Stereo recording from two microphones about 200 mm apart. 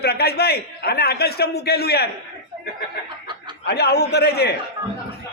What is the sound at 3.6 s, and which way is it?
Speech, 55° left (ahead or behind).